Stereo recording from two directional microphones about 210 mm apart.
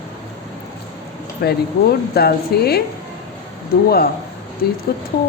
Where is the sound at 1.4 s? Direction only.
50° left (ahead or behind).